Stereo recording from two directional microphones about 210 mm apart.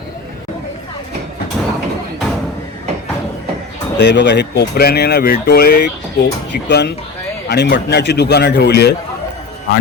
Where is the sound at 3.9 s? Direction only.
55° left (ahead or behind).